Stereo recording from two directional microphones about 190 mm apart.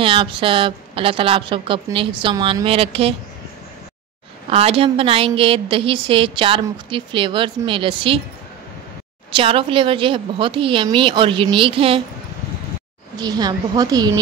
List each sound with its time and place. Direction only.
0.0 s a woman's voice: 25° right (ahead or behind)
4.5 s a woman's voice: 30° right (ahead or behind)
9.3 s a woman's voice: 30° right (ahead or behind)
13.2 s a woman's voice: 20° right (ahead or behind)